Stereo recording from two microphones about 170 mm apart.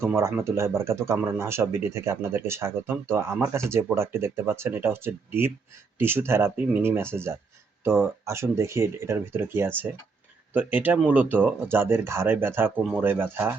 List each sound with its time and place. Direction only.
0.0 s speech: 15° right (ahead or behind)
12.7 s speech: centre (ahead or behind)
13.0 s speech: 10° right (ahead or behind)